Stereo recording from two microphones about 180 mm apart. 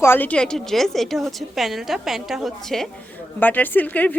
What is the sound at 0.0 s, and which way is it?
Speech, 10° left (ahead or behind).